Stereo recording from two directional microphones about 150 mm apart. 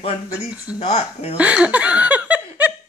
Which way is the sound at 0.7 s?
40° left (ahead or behind).